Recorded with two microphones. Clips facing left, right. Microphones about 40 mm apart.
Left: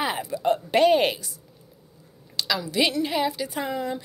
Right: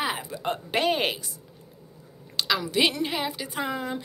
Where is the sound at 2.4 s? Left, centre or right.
Right.